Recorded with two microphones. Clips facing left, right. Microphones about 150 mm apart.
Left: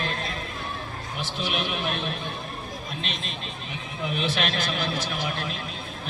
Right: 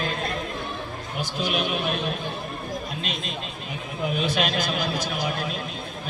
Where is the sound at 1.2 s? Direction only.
40° right (ahead or behind).